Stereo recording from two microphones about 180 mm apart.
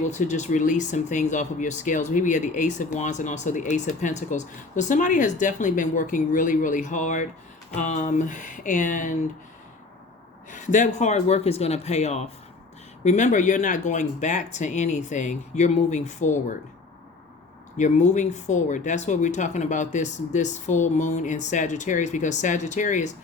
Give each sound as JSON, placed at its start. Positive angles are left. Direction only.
{"t": 0.0, "sound": "speech", "side_deg": 40}
{"t": 10.5, "sound": "speech", "side_deg": 45}
{"t": 17.7, "sound": "speech", "side_deg": 40}